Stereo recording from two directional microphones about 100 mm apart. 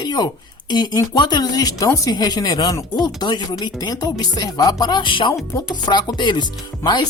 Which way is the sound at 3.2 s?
45° left (ahead or behind).